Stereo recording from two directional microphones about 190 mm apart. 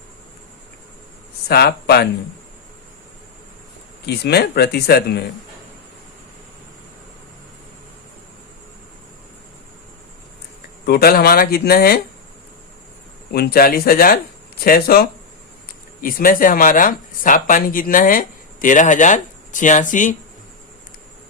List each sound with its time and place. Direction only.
1.5 s speech: 55° left (ahead or behind)
4.0 s speech: 60° left (ahead or behind)
10.8 s speech: 55° left (ahead or behind)
13.3 s speech: 55° left (ahead or behind)